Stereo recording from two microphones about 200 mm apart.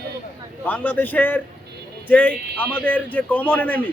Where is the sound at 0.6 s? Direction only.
10° left (ahead or behind).